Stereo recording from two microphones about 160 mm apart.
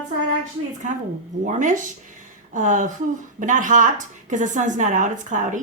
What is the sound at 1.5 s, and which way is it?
Speech, 50° right (ahead or behind).